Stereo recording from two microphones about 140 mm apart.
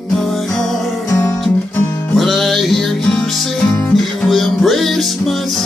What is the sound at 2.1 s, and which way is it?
Music, centre (ahead or behind).